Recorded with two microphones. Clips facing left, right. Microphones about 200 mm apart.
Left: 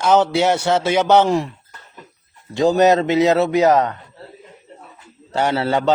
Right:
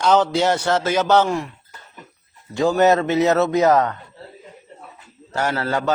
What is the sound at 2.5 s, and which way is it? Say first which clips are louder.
A man's voice: left 2 dB; 20° left (ahead or behind).